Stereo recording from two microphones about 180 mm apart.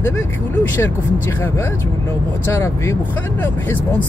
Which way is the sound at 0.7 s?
10° left (ahead or behind).